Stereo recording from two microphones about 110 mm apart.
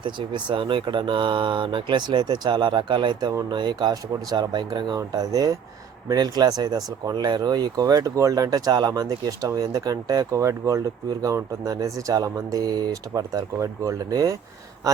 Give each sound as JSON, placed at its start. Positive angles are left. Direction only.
{"t": 0.0, "sound": "speech", "side_deg": -45}